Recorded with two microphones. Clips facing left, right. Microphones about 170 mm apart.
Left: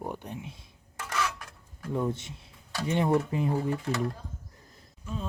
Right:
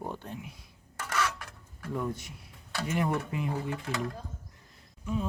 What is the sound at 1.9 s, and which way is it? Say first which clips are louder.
Speech: left 4 dB; 25° left (ahead or behind).